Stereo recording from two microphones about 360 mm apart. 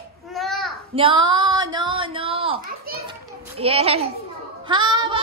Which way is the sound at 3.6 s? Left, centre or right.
Centre.